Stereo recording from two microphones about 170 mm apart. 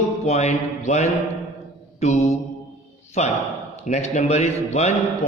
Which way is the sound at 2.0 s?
40° left (ahead or behind).